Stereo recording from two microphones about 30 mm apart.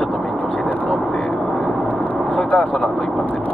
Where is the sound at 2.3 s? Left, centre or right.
Left.